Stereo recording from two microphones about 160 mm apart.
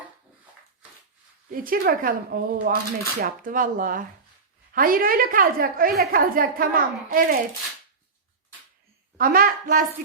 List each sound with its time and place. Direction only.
1.5 s a woman's voice: 60° right (ahead or behind)
9.1 s a woman's voice: 60° right (ahead or behind)